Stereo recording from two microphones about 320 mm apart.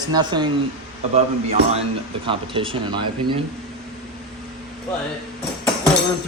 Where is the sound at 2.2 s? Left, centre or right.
Centre.